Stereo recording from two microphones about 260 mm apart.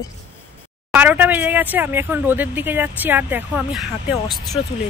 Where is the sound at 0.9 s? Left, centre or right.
Centre.